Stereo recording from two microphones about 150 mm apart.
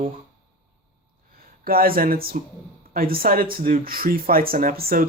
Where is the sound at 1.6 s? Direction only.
80° right.